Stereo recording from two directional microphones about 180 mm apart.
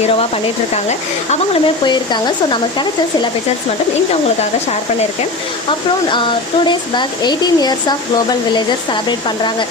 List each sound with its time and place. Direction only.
0.9 s speech: 40° left (ahead or behind)
1.8 s speech: 25° left (ahead or behind)
6.7 s speech: 25° left (ahead or behind)